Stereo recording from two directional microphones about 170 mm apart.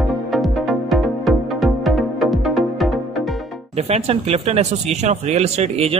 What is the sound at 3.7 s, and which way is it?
Speech, 40° right (ahead or behind).